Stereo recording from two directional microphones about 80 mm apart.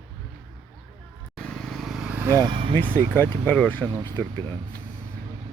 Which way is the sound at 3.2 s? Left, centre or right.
Left.